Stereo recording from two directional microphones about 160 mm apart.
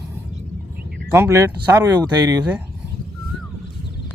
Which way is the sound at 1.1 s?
15° right (ahead or behind).